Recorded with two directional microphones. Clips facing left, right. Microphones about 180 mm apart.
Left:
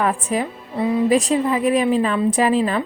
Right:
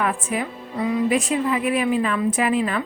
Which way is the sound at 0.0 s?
35° left (ahead or behind).